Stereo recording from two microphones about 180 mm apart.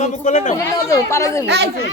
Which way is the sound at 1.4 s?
70° right (ahead or behind).